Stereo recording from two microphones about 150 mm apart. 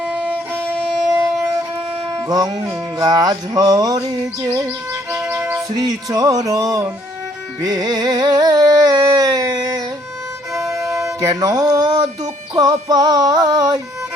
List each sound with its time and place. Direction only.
0.0 s music: 10° right (ahead or behind)
2.2 s music: 25° right (ahead or behind)
5.1 s music: 5° right (ahead or behind)
5.7 s music: 25° right (ahead or behind)
10.5 s violin: centre (ahead or behind)
11.0 s music: 20° right (ahead or behind)